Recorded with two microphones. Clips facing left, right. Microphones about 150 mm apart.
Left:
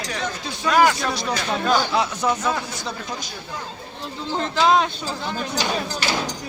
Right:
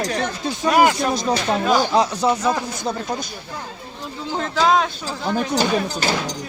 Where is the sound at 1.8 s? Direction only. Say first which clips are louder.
Right 4 dB; 40° right (ahead or behind).